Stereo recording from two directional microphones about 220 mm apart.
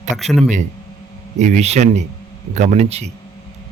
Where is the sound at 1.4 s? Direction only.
30° right (ahead or behind).